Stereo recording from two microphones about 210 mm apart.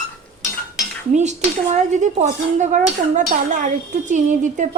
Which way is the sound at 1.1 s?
35° right (ahead or behind).